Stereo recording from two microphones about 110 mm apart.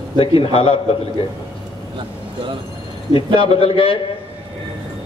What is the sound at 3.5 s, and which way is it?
Speech, 55° left (ahead or behind).